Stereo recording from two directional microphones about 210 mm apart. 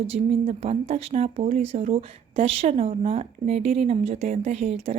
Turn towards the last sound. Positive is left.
turn(degrees=-30)  # may be behind; listen again after turning